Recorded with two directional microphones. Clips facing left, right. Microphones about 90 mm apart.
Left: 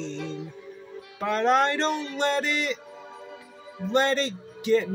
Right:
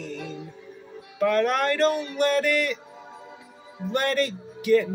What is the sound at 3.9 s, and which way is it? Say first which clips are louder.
Speech: left 1 dB; 25° left (ahead or behind).